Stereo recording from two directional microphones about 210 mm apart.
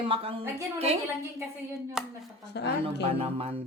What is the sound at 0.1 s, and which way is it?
Speech, 25° right (ahead or behind).